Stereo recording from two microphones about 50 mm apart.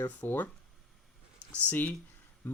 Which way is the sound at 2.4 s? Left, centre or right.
Left.